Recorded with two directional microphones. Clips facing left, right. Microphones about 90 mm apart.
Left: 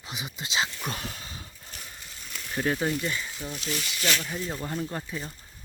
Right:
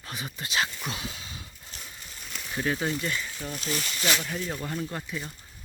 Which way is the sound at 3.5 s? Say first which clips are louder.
Right 2 dB; 45° right (ahead or behind).